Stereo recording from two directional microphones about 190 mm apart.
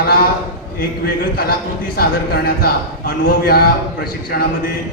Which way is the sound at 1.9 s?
55° left (ahead or behind).